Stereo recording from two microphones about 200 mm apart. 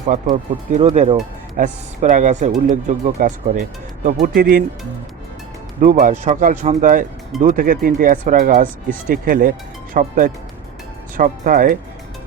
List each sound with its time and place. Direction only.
0.1 s speech: 40° right (ahead or behind)
5.8 s speech: 40° right (ahead or behind)